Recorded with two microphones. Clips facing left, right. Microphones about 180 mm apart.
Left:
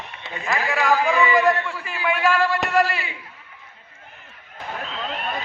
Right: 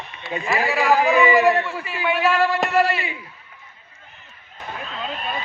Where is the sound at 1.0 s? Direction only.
20° right (ahead or behind).